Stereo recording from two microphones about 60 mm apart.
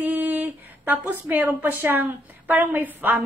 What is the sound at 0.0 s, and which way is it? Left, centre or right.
A woman's voice, right.